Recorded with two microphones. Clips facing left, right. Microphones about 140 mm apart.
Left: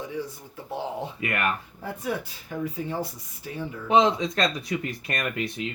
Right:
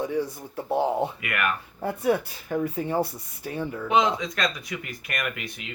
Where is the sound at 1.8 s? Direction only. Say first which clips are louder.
Right 9 dB; 60° right (ahead or behind).